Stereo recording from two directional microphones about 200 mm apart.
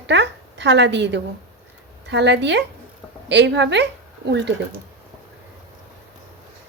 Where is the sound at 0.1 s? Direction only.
60° right (ahead or behind).